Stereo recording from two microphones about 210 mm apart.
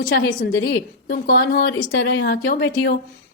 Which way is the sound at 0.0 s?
45° left (ahead or behind).